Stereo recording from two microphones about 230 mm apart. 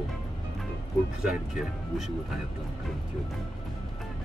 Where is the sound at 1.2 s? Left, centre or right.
Centre.